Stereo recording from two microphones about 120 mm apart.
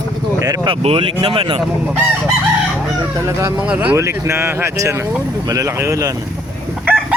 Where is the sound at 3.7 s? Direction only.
15° right (ahead or behind).